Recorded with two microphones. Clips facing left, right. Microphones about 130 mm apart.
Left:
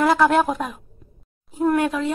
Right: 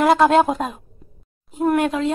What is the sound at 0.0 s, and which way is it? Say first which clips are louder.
A woman's voice: right 3 dB; 25° right (ahead or behind).